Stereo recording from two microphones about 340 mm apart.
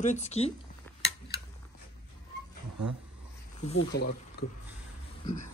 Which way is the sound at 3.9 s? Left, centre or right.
Left.